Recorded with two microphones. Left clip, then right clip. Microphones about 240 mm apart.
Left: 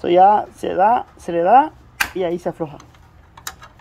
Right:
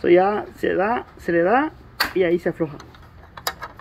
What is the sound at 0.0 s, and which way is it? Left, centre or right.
Speech, left.